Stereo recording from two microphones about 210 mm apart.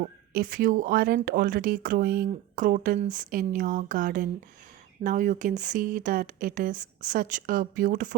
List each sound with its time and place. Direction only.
0.0 s speech: 40° right (ahead or behind)